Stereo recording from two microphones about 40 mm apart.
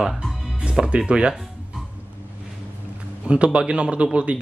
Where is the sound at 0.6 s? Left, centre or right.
Right.